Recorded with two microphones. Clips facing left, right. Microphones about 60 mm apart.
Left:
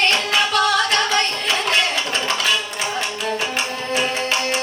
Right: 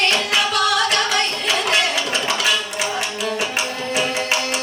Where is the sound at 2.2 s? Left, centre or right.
Left.